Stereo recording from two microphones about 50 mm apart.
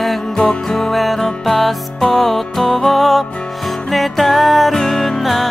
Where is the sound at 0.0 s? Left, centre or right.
Centre.